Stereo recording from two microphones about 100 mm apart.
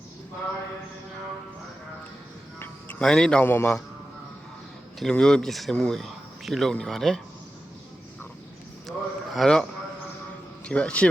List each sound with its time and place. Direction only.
3.0 s a man's voice: 5° left (ahead or behind)
3.4 s a man's voice: 20° left (ahead or behind)
4.9 s speech: 5° left (ahead or behind)
8.9 s a man's voice: centre (ahead or behind)